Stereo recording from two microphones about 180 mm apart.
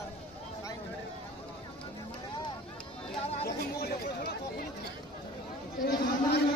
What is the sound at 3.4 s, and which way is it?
Chatter, 60° left (ahead or behind).